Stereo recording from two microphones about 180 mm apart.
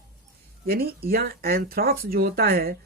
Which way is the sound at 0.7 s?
55° right (ahead or behind).